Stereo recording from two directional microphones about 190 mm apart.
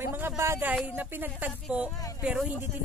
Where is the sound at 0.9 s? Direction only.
10° right (ahead or behind).